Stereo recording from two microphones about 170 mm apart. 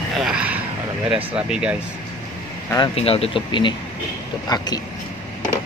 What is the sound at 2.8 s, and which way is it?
Speech, 35° left (ahead or behind).